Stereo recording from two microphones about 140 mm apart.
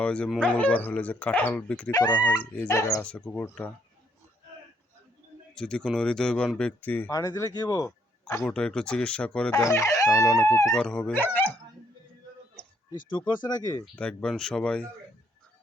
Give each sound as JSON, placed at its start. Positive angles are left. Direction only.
{"t": 0.0, "sound": "speech", "side_deg": 10}
{"t": 1.9, "sound": "speech", "side_deg": 30}
{"t": 3.0, "sound": "speech", "side_deg": 10}
{"t": 5.5, "sound": "speech", "side_deg": 5}
{"t": 7.1, "sound": "speech", "side_deg": 20}
{"t": 8.4, "sound": "speech", "side_deg": 5}
{"t": 9.6, "sound": "speech", "side_deg": 20}
{"t": 10.8, "sound": "speech", "side_deg": 5}
{"t": 12.9, "sound": "speech", "side_deg": 35}
{"t": 13.9, "sound": "speech", "side_deg": 10}